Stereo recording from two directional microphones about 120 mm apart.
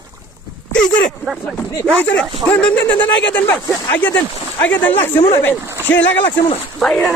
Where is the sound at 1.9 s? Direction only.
10° left (ahead or behind).